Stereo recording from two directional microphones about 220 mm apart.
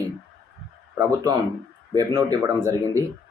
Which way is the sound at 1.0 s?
15° right (ahead or behind).